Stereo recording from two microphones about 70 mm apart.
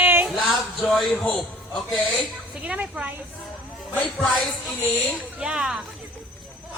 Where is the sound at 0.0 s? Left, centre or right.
Right.